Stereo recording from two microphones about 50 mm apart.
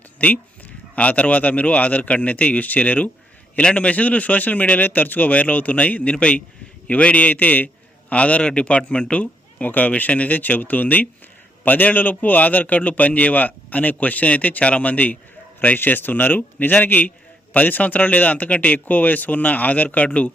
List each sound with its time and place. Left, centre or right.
0.9 s a man's voice: left